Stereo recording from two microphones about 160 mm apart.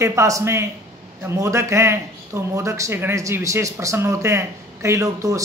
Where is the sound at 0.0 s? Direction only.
20° right (ahead or behind).